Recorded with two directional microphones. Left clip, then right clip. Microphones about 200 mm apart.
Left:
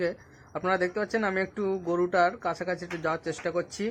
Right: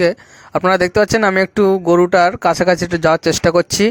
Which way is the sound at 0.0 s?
40° right (ahead or behind).